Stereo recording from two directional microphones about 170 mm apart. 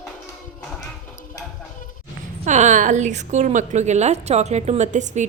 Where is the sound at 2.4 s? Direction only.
45° right (ahead or behind).